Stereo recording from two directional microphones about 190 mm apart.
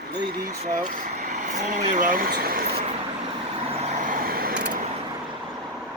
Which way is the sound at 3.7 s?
35° right (ahead or behind).